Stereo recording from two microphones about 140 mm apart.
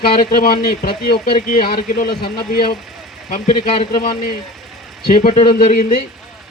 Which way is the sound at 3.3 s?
75° left (ahead or behind).